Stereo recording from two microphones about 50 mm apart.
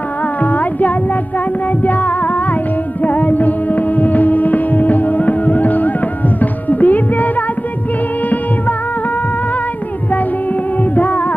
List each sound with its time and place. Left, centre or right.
0.4 s music: left
10.8 s music: left